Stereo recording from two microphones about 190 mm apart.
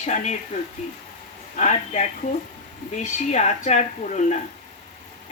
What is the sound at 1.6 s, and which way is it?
Speech, 35° left (ahead or behind).